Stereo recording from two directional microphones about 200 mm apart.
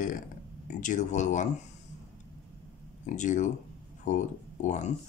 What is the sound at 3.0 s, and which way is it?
Speech, 40° left (ahead or behind).